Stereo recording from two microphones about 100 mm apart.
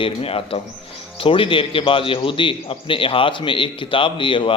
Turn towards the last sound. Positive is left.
turn(degrees=60)  # may be behind; listen again after turning